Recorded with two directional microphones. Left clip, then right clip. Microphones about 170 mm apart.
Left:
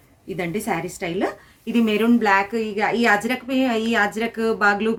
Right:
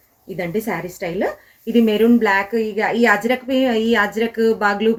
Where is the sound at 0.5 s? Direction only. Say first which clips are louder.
Right 3 dB; 45° left (ahead or behind).